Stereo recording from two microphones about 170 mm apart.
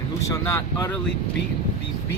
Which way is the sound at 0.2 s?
15° left (ahead or behind).